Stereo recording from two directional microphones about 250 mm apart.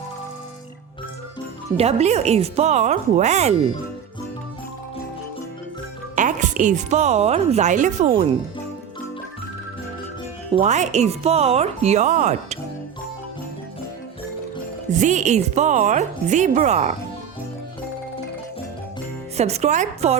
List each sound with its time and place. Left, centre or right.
1.7 s speech: right
6.1 s a woman's voice: right
10.5 s speech: right
14.9 s speech: right
19.4 s speech: right